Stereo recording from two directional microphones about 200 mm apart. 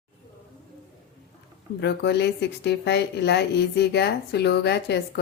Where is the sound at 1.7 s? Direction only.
55° left (ahead or behind).